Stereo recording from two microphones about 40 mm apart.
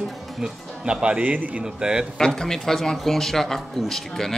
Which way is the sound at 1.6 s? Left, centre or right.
Centre.